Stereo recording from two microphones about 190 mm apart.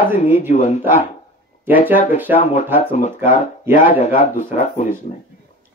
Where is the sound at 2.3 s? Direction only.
40° left (ahead or behind).